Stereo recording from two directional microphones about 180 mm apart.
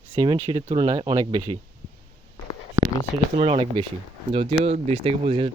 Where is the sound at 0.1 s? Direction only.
25° right (ahead or behind).